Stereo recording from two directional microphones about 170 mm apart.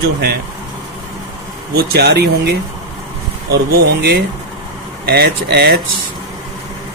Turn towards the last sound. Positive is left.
turn(degrees=-70)  # may be behind; listen again after turning